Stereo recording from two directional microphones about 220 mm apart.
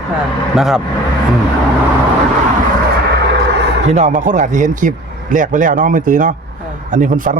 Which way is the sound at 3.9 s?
30° right (ahead or behind).